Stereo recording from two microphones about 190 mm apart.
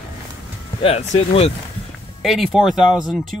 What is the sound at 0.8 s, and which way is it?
Speech, 30° left (ahead or behind).